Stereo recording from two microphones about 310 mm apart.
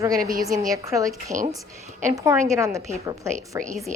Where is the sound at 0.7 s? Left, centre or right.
Centre.